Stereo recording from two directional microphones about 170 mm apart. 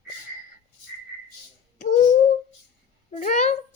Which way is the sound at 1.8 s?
45° left (ahead or behind).